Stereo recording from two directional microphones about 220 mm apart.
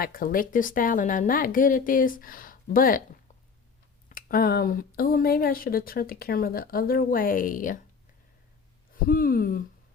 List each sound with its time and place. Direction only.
0.0 s speech: 40° left (ahead or behind)
4.1 s speech: 40° left (ahead or behind)
9.0 s speech: 40° left (ahead or behind)